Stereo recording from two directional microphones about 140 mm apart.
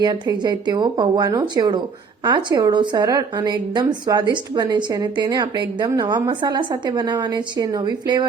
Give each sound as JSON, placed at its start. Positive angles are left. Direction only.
{"t": 0.0, "sound": "a woman's voice", "side_deg": -30}